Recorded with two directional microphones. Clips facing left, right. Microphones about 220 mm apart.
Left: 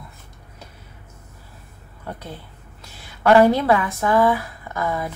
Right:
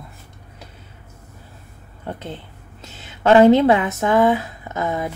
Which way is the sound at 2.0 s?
25° right (ahead or behind).